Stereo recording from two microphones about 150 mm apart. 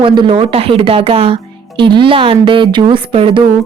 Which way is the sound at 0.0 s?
35° right (ahead or behind).